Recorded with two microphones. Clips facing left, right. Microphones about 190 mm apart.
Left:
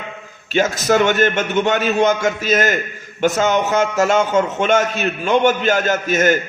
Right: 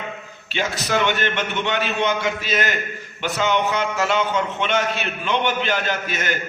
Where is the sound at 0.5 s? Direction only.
45° left (ahead or behind).